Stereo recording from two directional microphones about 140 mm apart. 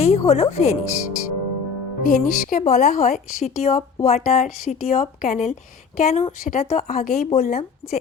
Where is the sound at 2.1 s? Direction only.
65° left (ahead or behind).